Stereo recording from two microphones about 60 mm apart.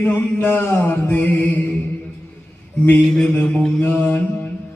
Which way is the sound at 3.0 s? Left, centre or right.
Centre.